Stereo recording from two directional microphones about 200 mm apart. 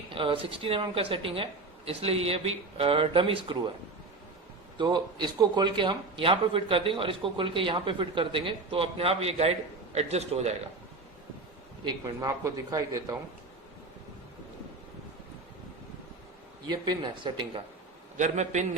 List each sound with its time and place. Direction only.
0.1 s a man's voice: 25° right (ahead or behind)
4.8 s a man's voice: 20° right (ahead or behind)
11.9 s a man's voice: 20° right (ahead or behind)
16.6 s a man's voice: 20° right (ahead or behind)
18.2 s a man's voice: 35° right (ahead or behind)